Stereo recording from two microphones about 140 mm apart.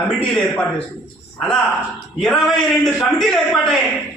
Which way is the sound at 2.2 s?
5° left (ahead or behind).